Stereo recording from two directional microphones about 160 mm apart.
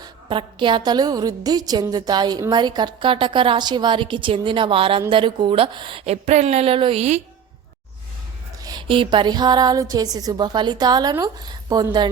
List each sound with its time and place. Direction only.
0.0 s a woman's voice: 30° right (ahead or behind)
6.2 s a woman's voice: 45° right (ahead or behind)
8.6 s speech: 30° right (ahead or behind)